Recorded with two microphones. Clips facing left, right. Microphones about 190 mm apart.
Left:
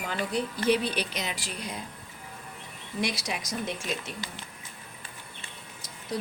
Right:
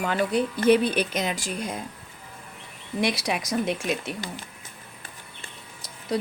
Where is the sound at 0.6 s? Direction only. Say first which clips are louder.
Right 7 dB; 50° right (ahead or behind).